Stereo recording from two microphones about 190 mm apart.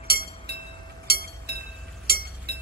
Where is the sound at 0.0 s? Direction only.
55° right (ahead or behind).